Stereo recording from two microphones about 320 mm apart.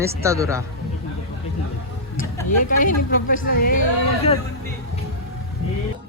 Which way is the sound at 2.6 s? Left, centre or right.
Left.